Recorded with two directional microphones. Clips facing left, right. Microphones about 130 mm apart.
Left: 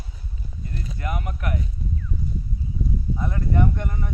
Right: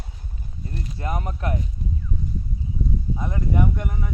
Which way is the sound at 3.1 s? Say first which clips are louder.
Even; 15° right (ahead or behind).